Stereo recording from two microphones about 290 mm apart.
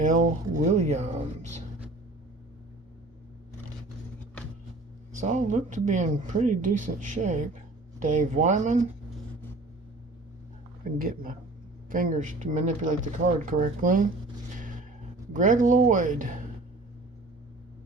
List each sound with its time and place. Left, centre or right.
0.0 s speech: right
5.2 s speech: right
10.9 s speech: right
14.6 s a sound: right
15.3 s speech: right